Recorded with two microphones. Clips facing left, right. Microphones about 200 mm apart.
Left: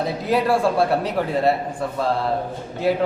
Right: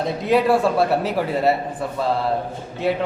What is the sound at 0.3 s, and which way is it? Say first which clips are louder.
A man's voice: right 2 dB; centre (ahead or behind).